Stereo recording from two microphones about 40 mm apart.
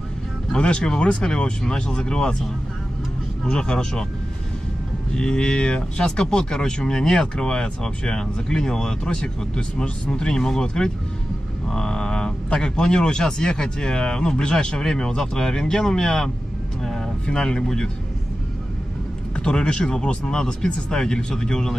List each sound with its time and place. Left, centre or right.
0.5 s speech: left
3.4 s speech: centre
5.1 s speech: centre
19.3 s speech: left